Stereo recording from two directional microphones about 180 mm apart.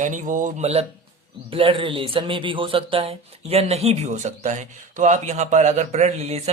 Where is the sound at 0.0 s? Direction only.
45° right (ahead or behind).